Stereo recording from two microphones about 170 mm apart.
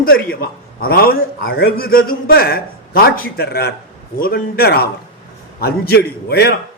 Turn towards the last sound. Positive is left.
turn(degrees=70)  # may be behind; listen again after turning